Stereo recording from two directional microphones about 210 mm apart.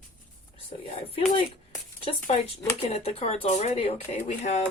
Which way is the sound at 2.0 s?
25° left (ahead or behind).